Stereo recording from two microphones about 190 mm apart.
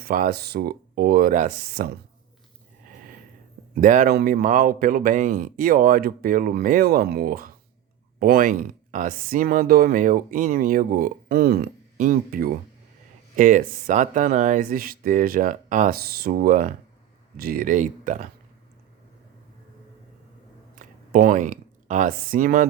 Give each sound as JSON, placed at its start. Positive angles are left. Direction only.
{"t": 0.0, "sound": "speech", "side_deg": -50}
{"t": 3.8, "sound": "speech", "side_deg": -45}
{"t": 20.7, "sound": "a sound", "side_deg": -50}